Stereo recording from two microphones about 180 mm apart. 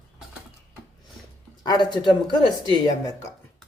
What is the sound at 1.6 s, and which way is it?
Speech, 25° left (ahead or behind).